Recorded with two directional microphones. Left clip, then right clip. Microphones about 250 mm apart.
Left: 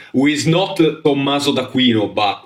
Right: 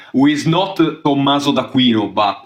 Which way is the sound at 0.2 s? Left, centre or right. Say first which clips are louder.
Right 1 dB; centre.